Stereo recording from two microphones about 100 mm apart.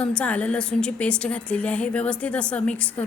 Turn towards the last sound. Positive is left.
turn(degrees=15)  # may be behind; listen again after turning